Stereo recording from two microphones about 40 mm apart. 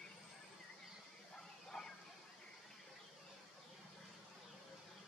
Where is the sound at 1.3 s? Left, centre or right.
Centre.